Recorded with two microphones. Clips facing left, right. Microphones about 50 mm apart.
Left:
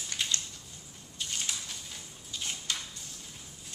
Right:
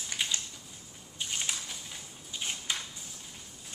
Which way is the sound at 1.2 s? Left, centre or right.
Centre.